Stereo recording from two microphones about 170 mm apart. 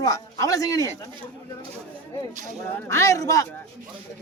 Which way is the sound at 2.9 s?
20° left (ahead or behind).